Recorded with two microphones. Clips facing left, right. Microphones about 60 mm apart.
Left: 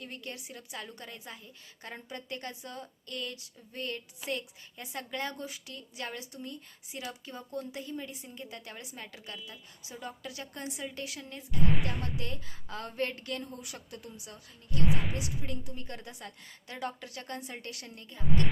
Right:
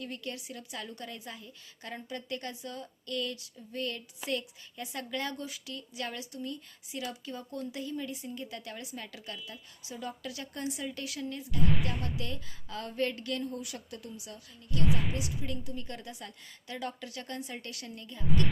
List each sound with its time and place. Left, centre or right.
0.0 s a woman's voice: left
14.8 s speech: centre
15.7 s a woman's voice: left